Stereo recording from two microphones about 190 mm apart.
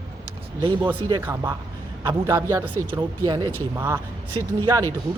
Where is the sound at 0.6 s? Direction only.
25° right (ahead or behind).